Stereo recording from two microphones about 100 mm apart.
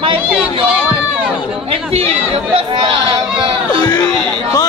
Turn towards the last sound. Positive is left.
turn(degrees=-60)  # may be behind; listen again after turning